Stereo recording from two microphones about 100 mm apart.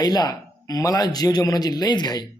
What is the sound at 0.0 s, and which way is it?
Speech, 40° left (ahead or behind).